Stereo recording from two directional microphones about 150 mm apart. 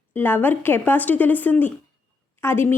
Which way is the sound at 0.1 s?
15° left (ahead or behind).